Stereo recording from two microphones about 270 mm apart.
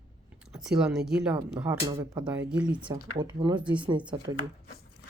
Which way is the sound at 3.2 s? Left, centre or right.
Centre.